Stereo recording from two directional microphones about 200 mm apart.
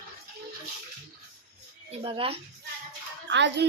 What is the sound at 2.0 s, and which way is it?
Speech, 25° right (ahead or behind).